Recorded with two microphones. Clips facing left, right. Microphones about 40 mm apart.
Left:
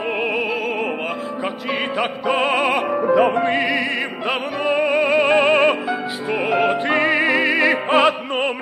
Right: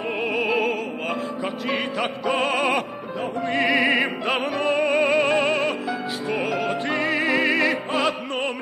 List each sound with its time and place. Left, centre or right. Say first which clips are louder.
0.4 s opera: even; centre
2.0 s music: left 6 dB; centre
3.5 s music: right 1 dB; centre
5.3 s music: left 6 dB; left
6.5 s music: left 6 dB; left
7.9 s opera: left 7 dB; left